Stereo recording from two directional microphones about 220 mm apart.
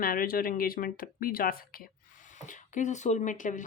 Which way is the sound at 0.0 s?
40° left (ahead or behind).